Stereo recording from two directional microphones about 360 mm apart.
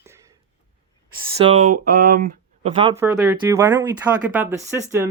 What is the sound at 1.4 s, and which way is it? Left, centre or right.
Speech, centre.